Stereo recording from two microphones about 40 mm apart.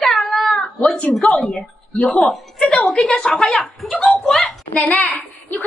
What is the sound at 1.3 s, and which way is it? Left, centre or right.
A woman's voice, centre.